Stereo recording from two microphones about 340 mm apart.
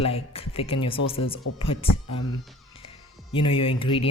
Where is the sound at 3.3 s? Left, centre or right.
Centre.